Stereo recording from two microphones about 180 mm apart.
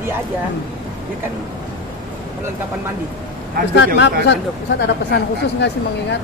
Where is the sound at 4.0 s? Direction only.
70° left (ahead or behind).